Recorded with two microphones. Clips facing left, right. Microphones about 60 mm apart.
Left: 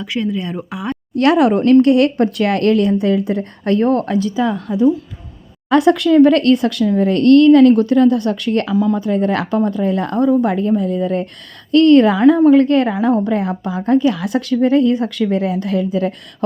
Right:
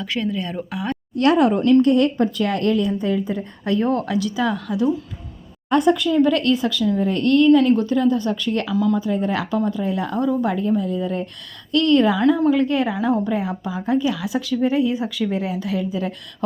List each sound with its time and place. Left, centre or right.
0.0 s speech: centre
1.1 s a woman's voice: left
5.6 s a woman's voice: left
8.7 s speech: left
9.0 s a woman's voice: left
11.7 s a woman's voice: left